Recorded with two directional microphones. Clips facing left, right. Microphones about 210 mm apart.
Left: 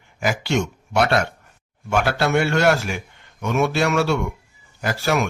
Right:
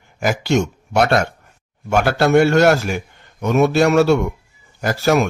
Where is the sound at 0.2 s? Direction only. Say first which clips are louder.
Right 4 dB; 45° right (ahead or behind).